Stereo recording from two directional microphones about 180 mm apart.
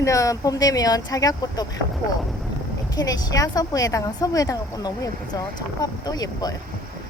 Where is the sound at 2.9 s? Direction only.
20° left (ahead or behind).